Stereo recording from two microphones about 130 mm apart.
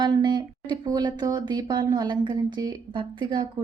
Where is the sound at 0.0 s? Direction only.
35° right (ahead or behind).